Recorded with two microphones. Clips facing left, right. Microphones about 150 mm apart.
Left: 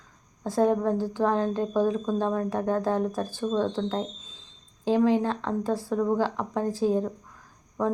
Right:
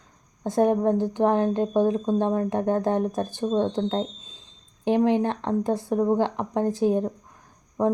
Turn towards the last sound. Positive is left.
turn(degrees=-20)  # may be behind; listen again after turning